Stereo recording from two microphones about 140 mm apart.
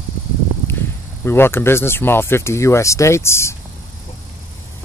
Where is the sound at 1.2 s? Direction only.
15° left (ahead or behind).